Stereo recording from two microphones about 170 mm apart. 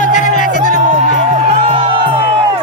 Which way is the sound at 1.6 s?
35° right (ahead or behind).